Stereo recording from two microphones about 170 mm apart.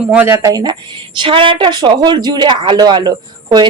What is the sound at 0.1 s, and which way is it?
Speech, 10° right (ahead or behind).